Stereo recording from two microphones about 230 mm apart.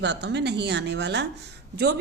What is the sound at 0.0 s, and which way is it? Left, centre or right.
A woman's voice, right.